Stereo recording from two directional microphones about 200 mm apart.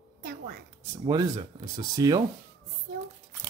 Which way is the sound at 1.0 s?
20° right (ahead or behind).